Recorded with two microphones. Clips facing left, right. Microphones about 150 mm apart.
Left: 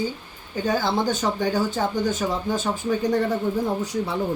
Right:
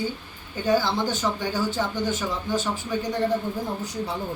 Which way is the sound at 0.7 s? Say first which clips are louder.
Left 1 dB; 50° left (ahead or behind).